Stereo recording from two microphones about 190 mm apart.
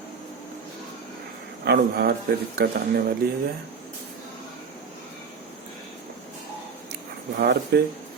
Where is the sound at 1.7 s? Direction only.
55° right (ahead or behind).